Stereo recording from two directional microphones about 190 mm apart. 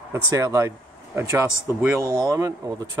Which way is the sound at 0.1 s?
15° right (ahead or behind).